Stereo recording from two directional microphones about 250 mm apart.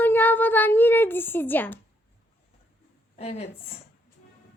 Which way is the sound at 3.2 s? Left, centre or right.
Left.